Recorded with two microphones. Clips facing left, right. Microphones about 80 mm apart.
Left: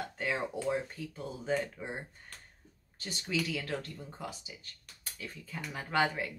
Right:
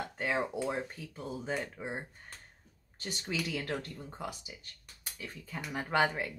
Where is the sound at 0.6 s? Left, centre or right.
Centre.